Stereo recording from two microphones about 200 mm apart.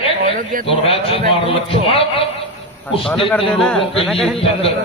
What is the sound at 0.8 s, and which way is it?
Speech, 30° left (ahead or behind).